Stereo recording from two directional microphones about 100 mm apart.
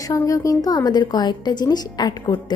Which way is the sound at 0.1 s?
35° left (ahead or behind).